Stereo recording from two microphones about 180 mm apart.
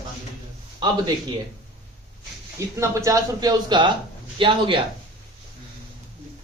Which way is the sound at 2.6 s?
15° right (ahead or behind).